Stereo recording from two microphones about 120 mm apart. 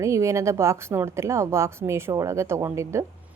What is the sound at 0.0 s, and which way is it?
A woman's voice, 25° right (ahead or behind).